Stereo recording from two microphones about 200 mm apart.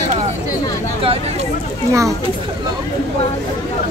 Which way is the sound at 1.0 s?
30° right (ahead or behind).